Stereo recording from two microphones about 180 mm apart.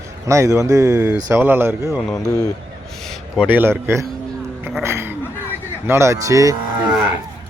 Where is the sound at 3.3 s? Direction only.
10° right (ahead or behind).